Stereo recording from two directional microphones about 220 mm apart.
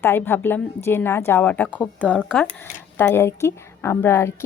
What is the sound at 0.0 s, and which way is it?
A woman's voice, 10° left (ahead or behind).